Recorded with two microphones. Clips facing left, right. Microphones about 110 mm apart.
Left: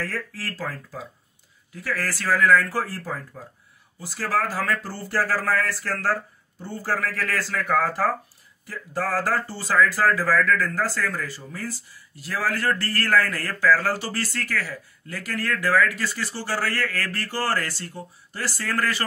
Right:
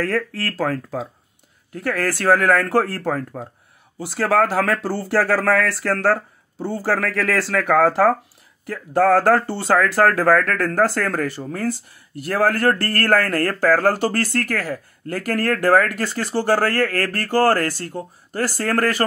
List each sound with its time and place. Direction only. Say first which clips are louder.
0.0 s speech: right 9 dB; 65° right (ahead or behind)
1.7 s speech: right 7 dB; 60° right (ahead or behind)